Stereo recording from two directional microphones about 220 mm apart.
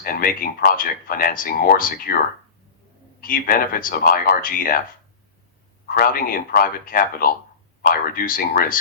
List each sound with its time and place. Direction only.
0.0 s speech: 40° left (ahead or behind)
3.2 s speech: 40° left (ahead or behind)
5.9 s speech: 40° left (ahead or behind)